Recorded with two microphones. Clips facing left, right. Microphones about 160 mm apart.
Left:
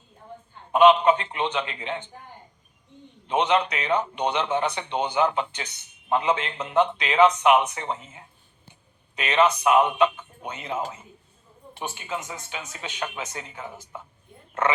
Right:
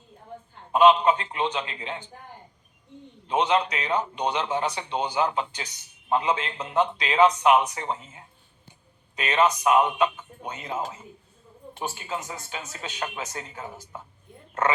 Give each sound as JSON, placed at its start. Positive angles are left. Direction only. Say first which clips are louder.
{"t": 0.8, "sound": "a man's voice", "louder": "left 2 dB", "side_deg": -35}
{"t": 3.2, "sound": "a man's voice", "louder": "left 1 dB", "side_deg": -35}
{"t": 11.8, "sound": "a man's voice", "louder": "even", "side_deg": -40}